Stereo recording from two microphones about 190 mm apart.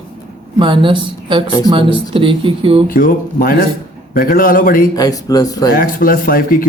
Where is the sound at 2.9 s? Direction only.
50° left (ahead or behind).